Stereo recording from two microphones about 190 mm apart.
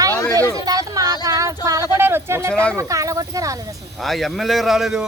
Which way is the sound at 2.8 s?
15° right (ahead or behind).